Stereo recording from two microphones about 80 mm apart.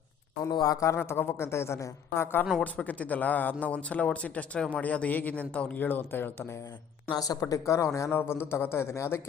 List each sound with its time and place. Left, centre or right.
0.5 s speech: left
0.9 s a man's voice: left
2.6 s speech: centre
7.1 s a man's voice: left